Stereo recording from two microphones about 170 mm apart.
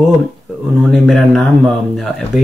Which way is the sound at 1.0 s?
Centre (ahead or behind).